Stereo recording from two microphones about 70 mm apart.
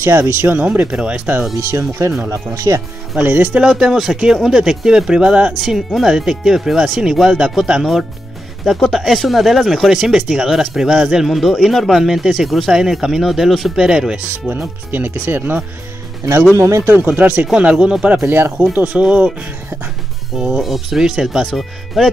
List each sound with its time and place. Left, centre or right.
0.0 s speech: right
0.6 s speech: right
1.6 s speech: right
3.2 s speech: right
3.6 s speech: centre
8.7 s speech: centre
14.9 s speech: right
16.5 s speech: right
17.1 s speech: right
18.2 s speech: right
18.7 s speech: right
20.3 s speech: centre